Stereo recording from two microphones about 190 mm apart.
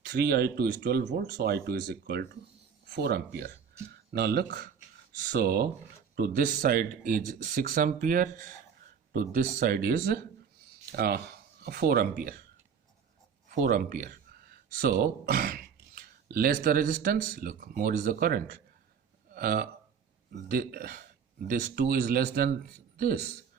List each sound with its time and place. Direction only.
0.0 s speech: 55° right (ahead or behind)
13.5 s speech: 45° right (ahead or behind)